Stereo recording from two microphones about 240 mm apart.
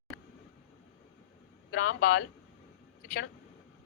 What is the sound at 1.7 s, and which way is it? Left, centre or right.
Speech, left.